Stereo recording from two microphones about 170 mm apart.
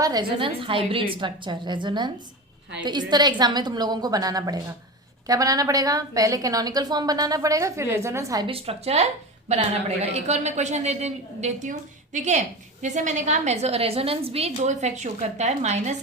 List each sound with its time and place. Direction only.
0.0 s a woman's voice: 25° right (ahead or behind)
8.4 s a woman's voice: 35° right (ahead or behind)